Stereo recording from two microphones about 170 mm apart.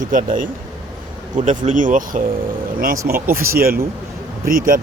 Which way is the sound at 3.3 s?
60° right (ahead or behind).